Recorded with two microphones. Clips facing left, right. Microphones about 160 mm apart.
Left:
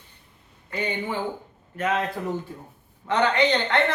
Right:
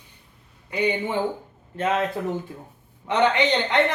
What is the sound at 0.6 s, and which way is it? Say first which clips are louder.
Speech: right 6 dB; 15° right (ahead or behind).